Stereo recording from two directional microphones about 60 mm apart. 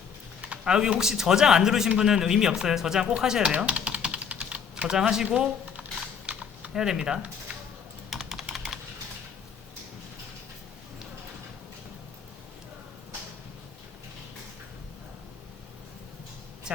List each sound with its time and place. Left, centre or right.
0.4 s speech: centre
3.1 s typing: centre
16.7 s a sound: centre